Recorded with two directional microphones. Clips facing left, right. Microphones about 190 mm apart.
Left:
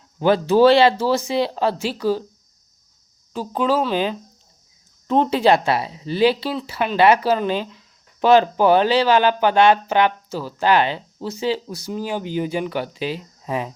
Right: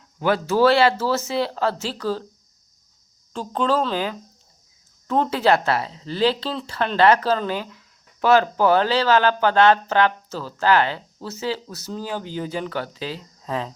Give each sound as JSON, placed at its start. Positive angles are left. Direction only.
{"t": 0.2, "sound": "speech", "side_deg": 25}
{"t": 3.3, "sound": "speech", "side_deg": 5}